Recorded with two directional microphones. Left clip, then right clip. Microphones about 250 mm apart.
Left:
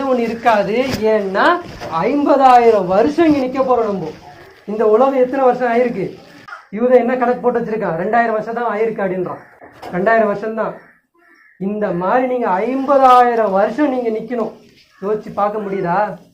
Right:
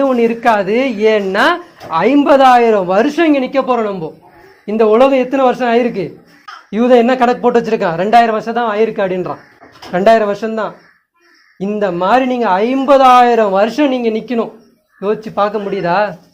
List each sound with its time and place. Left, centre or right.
0.0 s speech: right
4.8 s speech: right
11.8 s speech: right